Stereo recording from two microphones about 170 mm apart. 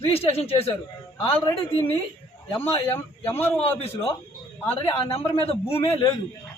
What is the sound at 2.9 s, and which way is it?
Speech, 10° left (ahead or behind).